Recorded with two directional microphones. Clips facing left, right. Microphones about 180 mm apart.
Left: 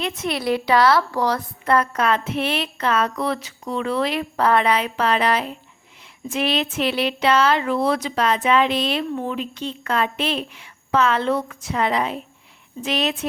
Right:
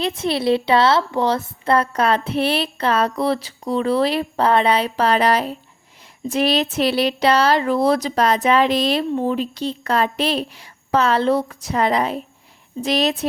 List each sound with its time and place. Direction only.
0.0 s speech: 30° right (ahead or behind)